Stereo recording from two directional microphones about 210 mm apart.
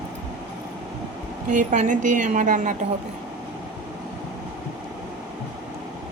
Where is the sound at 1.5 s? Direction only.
40° right (ahead or behind).